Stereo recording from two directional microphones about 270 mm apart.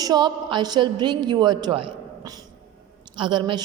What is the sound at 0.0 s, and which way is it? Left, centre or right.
A woman's voice, centre.